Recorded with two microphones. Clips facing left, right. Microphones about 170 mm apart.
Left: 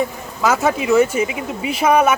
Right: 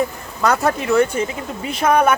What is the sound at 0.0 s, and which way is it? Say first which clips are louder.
Cattle: even; centre (ahead or behind).